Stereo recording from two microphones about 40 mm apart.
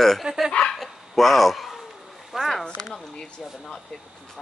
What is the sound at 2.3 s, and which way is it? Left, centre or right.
Speech, centre.